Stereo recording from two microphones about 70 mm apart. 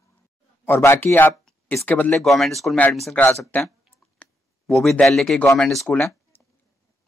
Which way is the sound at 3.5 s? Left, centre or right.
Left.